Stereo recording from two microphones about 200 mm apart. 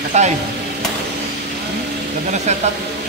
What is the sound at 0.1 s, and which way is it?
Speech, 35° right (ahead or behind).